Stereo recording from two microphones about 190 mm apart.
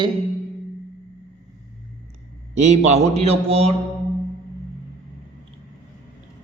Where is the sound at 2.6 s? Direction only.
35° right (ahead or behind).